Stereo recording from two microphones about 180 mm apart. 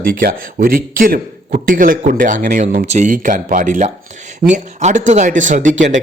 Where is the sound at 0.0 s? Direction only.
55° right (ahead or behind).